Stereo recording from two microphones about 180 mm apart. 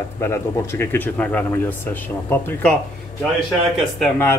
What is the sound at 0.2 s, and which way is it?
Speech, 15° left (ahead or behind).